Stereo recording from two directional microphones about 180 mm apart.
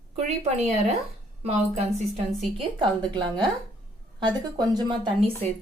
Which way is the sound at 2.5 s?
25° right (ahead or behind).